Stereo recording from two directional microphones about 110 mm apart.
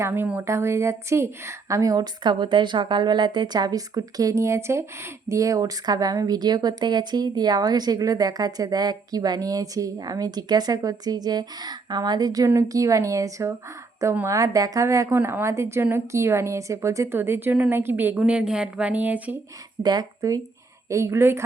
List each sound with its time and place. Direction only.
0.0 s speech: 20° right (ahead or behind)
19.8 s speech: 35° right (ahead or behind)